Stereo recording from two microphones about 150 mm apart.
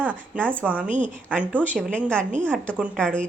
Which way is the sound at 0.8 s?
55° right (ahead or behind).